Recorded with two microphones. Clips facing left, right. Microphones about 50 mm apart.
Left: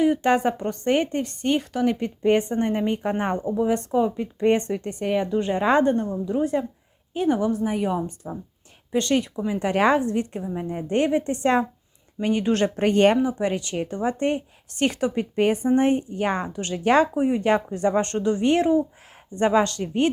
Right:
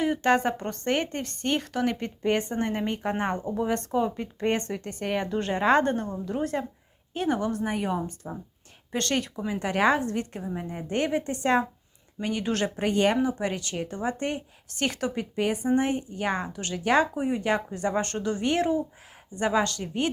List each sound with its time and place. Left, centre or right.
0.2 s speech: centre
4.4 s speech: left
5.0 s speech: centre
7.3 s speech: centre
9.0 s speech: centre
9.6 s speech: left
10.4 s speech: centre
10.8 s speech: left
13.2 s speech: left